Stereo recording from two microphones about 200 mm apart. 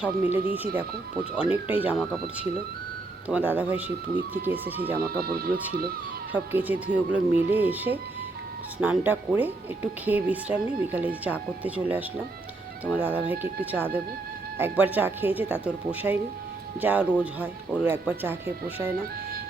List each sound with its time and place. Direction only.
0.0 s speech: 10° right (ahead or behind)
5.2 s speech: 50° right (ahead or behind)
6.3 s speech: 10° right (ahead or behind)